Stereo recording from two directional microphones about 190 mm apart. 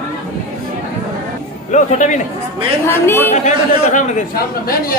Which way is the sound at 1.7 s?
40° left (ahead or behind).